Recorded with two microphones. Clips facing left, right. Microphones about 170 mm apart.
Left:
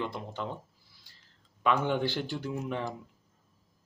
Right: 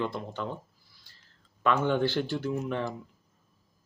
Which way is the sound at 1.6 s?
15° left (ahead or behind).